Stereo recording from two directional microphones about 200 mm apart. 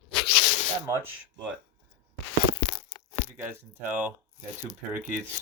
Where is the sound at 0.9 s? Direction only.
15° right (ahead or behind).